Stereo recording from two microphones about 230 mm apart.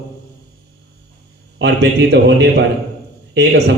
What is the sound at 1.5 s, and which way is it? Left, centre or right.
A man's voice, right.